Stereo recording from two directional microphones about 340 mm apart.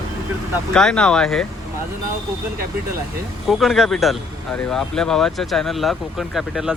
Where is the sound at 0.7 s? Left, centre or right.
Centre.